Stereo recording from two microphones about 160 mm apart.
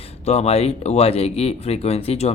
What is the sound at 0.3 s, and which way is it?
Speech, 40° left (ahead or behind).